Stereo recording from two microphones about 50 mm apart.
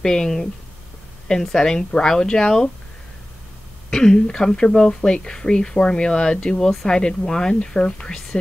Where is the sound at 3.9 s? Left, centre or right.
Centre.